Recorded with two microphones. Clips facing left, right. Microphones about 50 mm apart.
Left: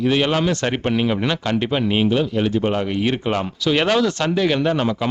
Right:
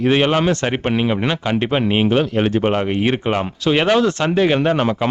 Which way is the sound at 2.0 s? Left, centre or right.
Right.